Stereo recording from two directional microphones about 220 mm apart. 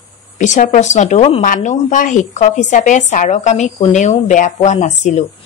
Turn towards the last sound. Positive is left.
turn(degrees=30)  # may be behind; listen again after turning